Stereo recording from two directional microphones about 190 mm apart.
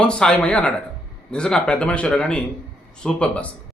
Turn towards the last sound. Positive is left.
turn(degrees=5)  # may be behind; listen again after turning